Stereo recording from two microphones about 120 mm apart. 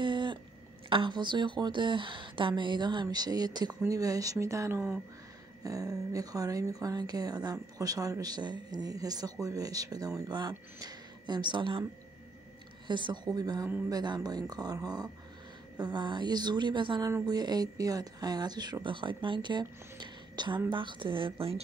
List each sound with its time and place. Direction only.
0.0 s a sound: 40° right (ahead or behind)
0.8 s speech: 45° right (ahead or behind); by 5.0 s 20° right (ahead or behind)
5.6 s speech: 30° right (ahead or behind)
12.8 s a woman's voice: 40° right (ahead or behind)